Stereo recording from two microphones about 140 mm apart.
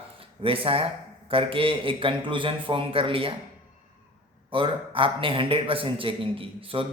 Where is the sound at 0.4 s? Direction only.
40° right (ahead or behind).